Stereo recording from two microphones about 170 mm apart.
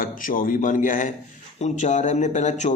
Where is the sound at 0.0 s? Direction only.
55° left (ahead or behind).